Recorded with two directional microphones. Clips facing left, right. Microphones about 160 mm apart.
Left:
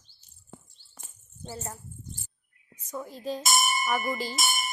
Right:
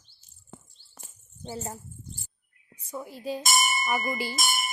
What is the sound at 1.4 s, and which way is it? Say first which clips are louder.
Speech: right 3 dB; 20° right (ahead or behind).